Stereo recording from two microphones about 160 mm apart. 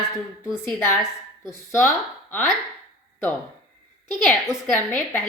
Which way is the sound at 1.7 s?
10° left (ahead or behind).